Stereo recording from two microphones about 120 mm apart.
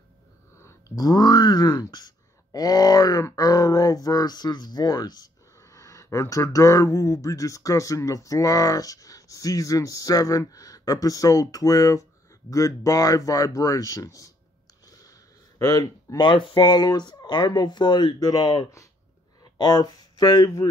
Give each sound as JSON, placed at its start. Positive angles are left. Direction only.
{"t": 0.6, "sound": "speech", "side_deg": 25}
{"t": 14.9, "sound": "a sound", "side_deg": 30}
{"t": 15.6, "sound": "speech", "side_deg": 30}